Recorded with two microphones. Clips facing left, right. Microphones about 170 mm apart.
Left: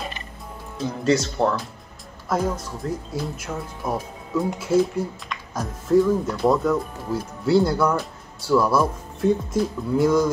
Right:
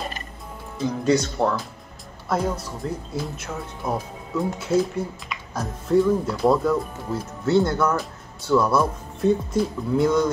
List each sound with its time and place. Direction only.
0.7 s speech: centre (ahead or behind)